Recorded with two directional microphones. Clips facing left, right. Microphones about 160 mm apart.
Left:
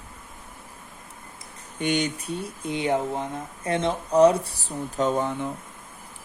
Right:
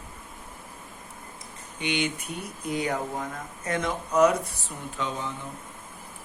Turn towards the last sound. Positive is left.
turn(degrees=55)  # may be behind; listen again after turning